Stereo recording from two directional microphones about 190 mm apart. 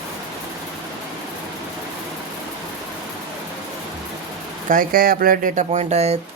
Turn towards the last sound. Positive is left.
turn(degrees=-35)  # may be behind; listen again after turning